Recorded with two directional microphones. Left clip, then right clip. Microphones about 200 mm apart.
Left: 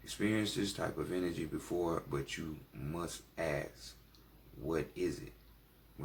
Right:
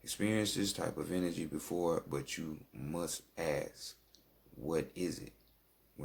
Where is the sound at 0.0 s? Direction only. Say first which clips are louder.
Even; 50° right (ahead or behind).